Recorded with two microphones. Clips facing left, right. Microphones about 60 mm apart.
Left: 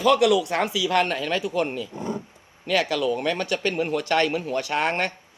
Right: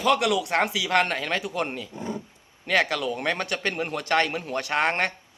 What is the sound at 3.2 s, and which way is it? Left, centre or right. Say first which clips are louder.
Speech: left 2 dB; right.